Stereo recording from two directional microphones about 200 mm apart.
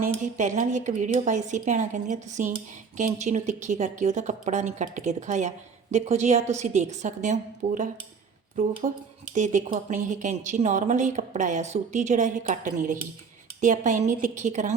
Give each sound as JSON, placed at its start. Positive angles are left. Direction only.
{"t": 0.3, "sound": "a woman's voice", "side_deg": -35}